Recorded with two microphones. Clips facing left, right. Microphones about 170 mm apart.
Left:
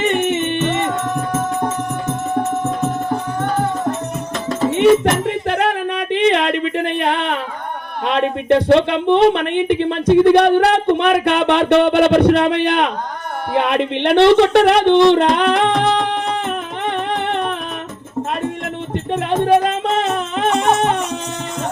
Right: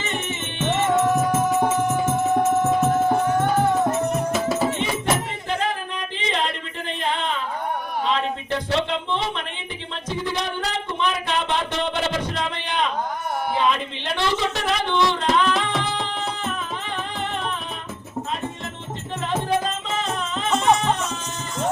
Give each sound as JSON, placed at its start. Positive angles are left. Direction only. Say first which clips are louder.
{"t": 0.0, "sound": "music", "louder": "left 12 dB", "side_deg": 65}
{"t": 0.9, "sound": "music", "louder": "right 1 dB", "side_deg": -10}
{"t": 5.3, "sound": "a sound", "louder": "left 8 dB", "side_deg": 65}
{"t": 8.0, "sound": "speech", "louder": "left 9 dB", "side_deg": 65}
{"t": 13.5, "sound": "music", "louder": "left 7 dB", "side_deg": 65}
{"t": 19.1, "sound": "music", "louder": "left 9 dB", "side_deg": 65}